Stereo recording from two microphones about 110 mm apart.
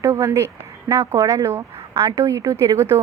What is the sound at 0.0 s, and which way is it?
A woman's voice, 25° right (ahead or behind).